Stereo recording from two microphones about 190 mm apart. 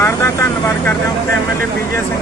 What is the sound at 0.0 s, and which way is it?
Vehicle, 15° left (ahead or behind).